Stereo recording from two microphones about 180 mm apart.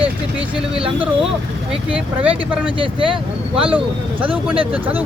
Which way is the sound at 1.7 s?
5° right (ahead or behind).